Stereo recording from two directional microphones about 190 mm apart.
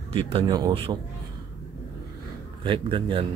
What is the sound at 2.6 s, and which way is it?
Speech, 25° right (ahead or behind).